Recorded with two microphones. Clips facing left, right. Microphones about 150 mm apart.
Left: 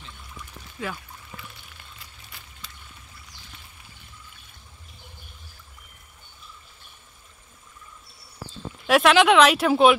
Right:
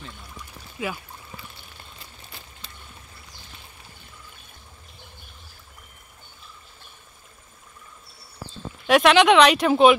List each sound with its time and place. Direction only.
0.7 s speech: 10° right (ahead or behind)
2.6 s boat: 30° right (ahead or behind)
8.8 s speech: centre (ahead or behind)